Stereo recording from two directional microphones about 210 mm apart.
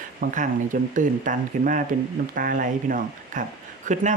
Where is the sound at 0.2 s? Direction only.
40° right (ahead or behind).